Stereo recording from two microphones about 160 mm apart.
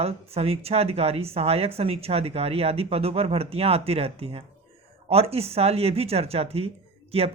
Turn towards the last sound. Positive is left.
turn(degrees=-40)  # may be behind; listen again after turning